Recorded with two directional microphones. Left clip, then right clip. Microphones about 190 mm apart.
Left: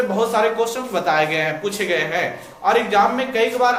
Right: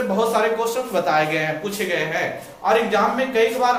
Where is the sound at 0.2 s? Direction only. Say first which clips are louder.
Left 1 dB; 5° left (ahead or behind).